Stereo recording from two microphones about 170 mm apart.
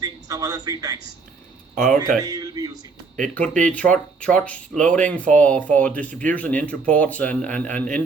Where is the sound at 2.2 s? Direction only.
20° right (ahead or behind).